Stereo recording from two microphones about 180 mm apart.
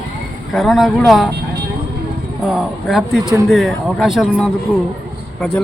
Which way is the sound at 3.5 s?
Centre (ahead or behind).